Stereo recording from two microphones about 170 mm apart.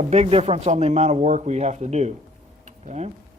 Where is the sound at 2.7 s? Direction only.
45° right (ahead or behind).